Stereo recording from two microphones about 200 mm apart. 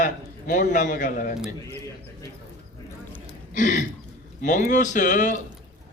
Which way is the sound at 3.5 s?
40° left (ahead or behind).